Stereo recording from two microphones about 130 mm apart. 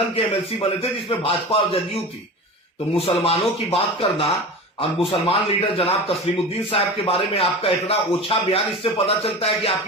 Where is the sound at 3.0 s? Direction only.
50° left (ahead or behind).